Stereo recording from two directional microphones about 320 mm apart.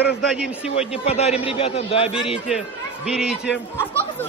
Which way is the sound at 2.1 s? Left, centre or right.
Centre.